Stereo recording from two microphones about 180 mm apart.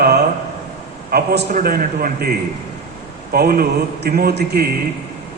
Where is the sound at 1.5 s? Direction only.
50° right (ahead or behind).